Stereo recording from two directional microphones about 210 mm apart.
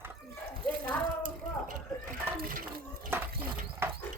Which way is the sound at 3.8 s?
10° right (ahead or behind).